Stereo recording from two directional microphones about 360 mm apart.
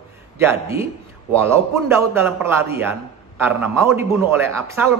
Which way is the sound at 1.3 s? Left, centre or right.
Centre.